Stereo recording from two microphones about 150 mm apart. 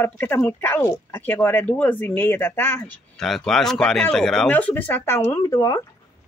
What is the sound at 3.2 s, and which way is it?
Speech, centre (ahead or behind).